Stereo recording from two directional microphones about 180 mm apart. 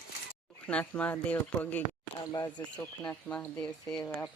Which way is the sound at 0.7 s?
5° left (ahead or behind).